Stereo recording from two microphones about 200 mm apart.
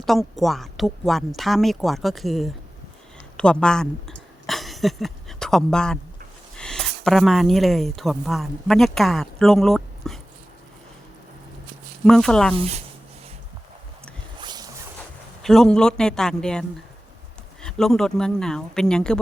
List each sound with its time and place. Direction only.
0.0 s speech: centre (ahead or behind)
4.4 s dog: centre (ahead or behind)
6.6 s speech: centre (ahead or behind)
12.0 s speech: 5° left (ahead or behind)
12.5 s speech: 30° right (ahead or behind)
14.4 s a sound: 20° right (ahead or behind)
15.4 s speech: centre (ahead or behind)